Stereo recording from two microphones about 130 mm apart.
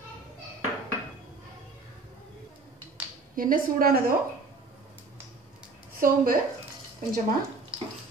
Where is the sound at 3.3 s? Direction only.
90° right.